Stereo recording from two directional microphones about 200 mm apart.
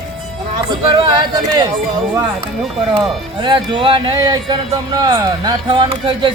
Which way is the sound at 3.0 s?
25° right (ahead or behind).